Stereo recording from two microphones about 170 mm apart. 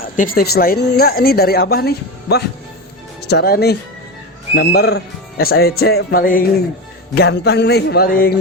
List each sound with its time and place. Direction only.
0.2 s speech: 60° left (ahead or behind)
7.2 s speech: 75° left (ahead or behind)